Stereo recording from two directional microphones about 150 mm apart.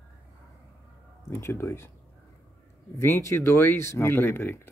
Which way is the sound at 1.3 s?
20° left (ahead or behind).